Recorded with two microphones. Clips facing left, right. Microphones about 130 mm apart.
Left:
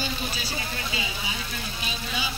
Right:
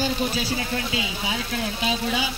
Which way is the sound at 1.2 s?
75° right (ahead or behind).